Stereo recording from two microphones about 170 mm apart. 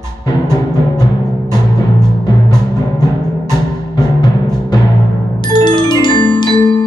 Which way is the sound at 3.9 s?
25° left (ahead or behind).